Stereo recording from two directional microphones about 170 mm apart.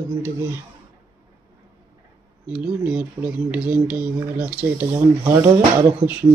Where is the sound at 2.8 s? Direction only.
5° right (ahead or behind).